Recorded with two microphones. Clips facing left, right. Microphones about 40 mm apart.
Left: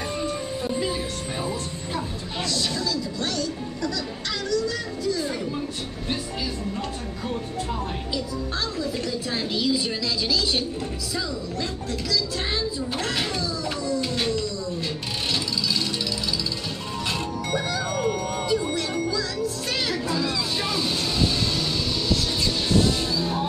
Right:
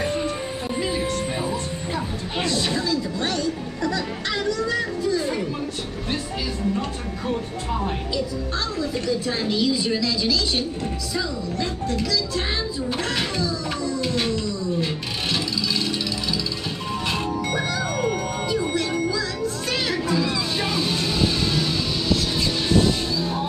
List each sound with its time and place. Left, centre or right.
0.1 s music: right
2.4 s music: right
8.7 s a woman's voice: centre
13.4 s a sound: centre
17.5 s music: centre